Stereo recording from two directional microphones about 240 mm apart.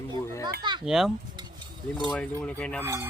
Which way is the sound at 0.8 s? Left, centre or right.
Centre.